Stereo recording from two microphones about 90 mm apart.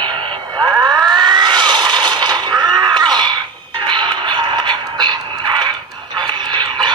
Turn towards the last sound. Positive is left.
turn(degrees=-55)  # may be behind; listen again after turning